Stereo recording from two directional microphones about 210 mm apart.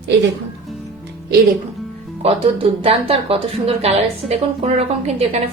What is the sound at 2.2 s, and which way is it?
A woman's voice, 25° right (ahead or behind).